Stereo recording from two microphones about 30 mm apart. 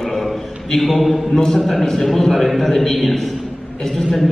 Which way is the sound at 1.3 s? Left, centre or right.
Left.